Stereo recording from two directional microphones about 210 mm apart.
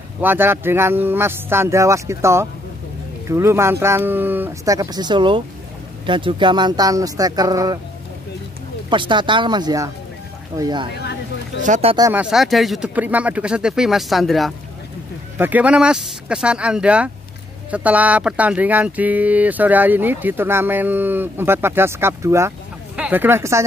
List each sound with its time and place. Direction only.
0.2 s speech: 10° right (ahead or behind)
8.9 s speech: 25° right (ahead or behind)
11.0 s a sound: 55° left (ahead or behind)
11.6 s speech: 30° right (ahead or behind)
12.0 s speech: 10° right (ahead or behind)